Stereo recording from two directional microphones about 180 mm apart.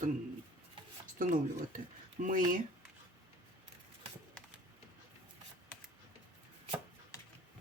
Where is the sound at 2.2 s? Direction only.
50° right (ahead or behind).